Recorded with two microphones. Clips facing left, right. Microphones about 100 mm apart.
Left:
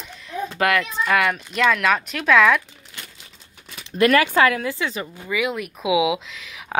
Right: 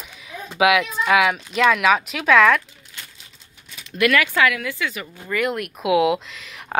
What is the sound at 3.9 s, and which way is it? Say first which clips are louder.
Speech: left 3 dB; 35° left (ahead or behind).